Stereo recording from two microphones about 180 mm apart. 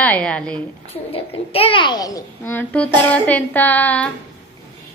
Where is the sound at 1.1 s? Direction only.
30° left (ahead or behind); by 4.1 s 10° left (ahead or behind).